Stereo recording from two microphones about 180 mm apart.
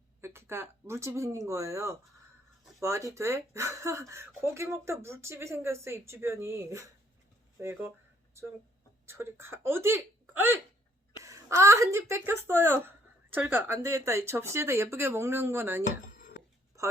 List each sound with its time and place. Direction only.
0.2 s speech: 15° right (ahead or behind)
9.0 s speech: 15° right (ahead or behind)
16.1 s a sound: 55° left (ahead or behind)